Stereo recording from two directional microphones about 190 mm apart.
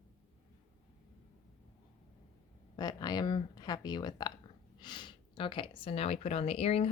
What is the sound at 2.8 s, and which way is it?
Speech, 20° left (ahead or behind).